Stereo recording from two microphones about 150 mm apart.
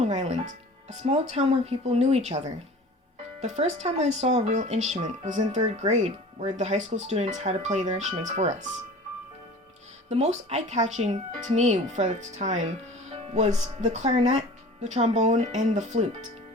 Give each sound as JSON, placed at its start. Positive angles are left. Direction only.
{"t": 0.0, "sound": "speech", "side_deg": -50}
{"t": 10.1, "sound": "speech", "side_deg": -50}